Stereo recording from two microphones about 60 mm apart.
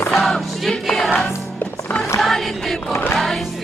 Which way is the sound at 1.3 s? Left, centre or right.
Left.